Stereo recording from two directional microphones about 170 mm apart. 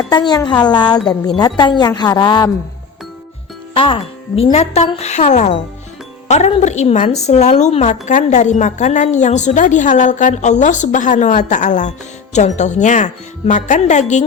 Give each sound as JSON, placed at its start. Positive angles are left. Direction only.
{"t": 0.1, "sound": "a woman's voice", "side_deg": 25}
{"t": 3.8, "sound": "speech", "side_deg": 30}